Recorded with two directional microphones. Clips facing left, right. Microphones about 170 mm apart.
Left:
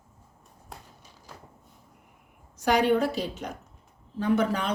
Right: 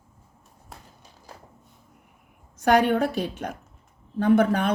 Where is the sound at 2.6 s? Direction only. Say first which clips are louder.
Right 3 dB; 55° right (ahead or behind).